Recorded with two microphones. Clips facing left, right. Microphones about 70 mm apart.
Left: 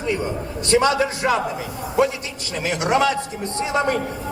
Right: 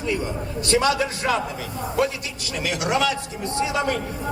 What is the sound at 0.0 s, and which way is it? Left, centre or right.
A man's voice, left.